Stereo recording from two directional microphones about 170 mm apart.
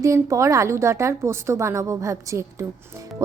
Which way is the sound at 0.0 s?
20° right (ahead or behind).